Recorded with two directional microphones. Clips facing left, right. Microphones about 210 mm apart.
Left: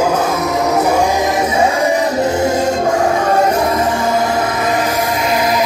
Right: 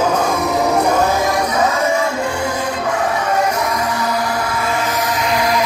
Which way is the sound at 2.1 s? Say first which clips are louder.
Left 6 dB; 40° left (ahead or behind).